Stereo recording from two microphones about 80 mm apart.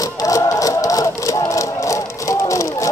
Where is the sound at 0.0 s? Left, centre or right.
Left.